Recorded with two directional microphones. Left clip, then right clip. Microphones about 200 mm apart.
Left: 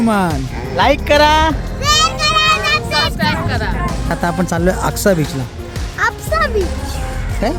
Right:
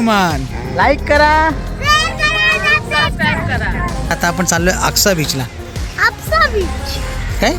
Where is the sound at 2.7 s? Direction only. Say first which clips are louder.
Right 2 dB; 25° left (ahead or behind).